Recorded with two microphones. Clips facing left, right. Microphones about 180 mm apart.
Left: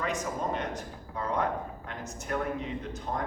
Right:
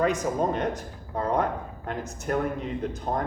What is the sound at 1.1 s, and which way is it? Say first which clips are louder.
A man's voice: right 4 dB; 45° right (ahead or behind).